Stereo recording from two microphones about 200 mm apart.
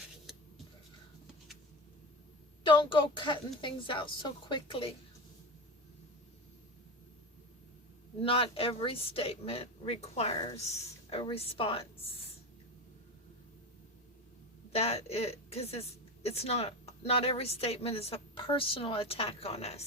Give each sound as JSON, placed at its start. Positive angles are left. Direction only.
{"t": 2.6, "sound": "a woman's voice", "side_deg": 25}
{"t": 8.2, "sound": "a woman's voice", "side_deg": 25}
{"t": 14.7, "sound": "a woman's voice", "side_deg": 30}